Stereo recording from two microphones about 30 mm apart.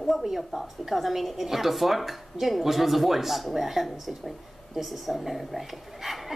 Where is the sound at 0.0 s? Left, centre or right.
Centre.